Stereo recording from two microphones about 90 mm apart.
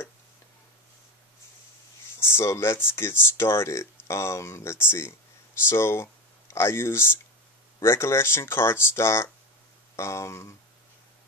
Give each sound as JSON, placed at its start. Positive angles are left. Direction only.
{"t": 2.1, "sound": "speech", "side_deg": 25}